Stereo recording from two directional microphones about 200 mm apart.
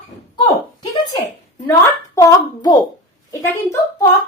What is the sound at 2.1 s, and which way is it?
Speech, 20° left (ahead or behind).